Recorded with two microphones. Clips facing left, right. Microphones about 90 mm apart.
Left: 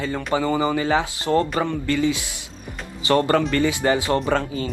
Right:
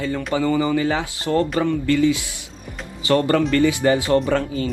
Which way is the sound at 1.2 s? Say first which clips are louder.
Right 2 dB; 20° left (ahead or behind).